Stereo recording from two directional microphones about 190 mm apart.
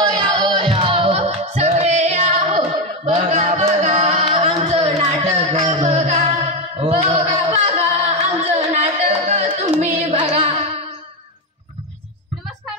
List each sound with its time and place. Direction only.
0.0 s music: 20° right (ahead or behind)
6.8 s a sound: 30° right (ahead or behind)
10.3 s music: 30° right (ahead or behind)